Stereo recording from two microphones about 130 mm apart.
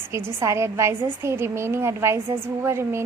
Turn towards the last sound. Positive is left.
turn(degrees=-20)  # may be behind; listen again after turning